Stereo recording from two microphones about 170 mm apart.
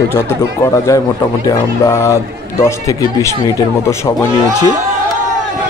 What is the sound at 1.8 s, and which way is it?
Speech, 15° left (ahead or behind).